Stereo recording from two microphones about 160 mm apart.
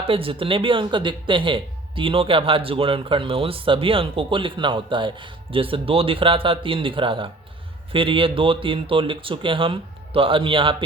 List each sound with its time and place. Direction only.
0.1 s speech: 35° right (ahead or behind)